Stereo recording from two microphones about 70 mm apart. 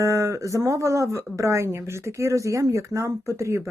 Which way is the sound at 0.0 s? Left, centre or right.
Right.